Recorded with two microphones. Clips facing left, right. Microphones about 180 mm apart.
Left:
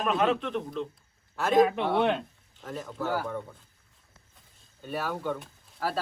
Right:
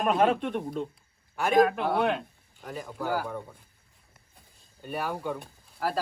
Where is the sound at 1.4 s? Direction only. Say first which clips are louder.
Even; centre (ahead or behind).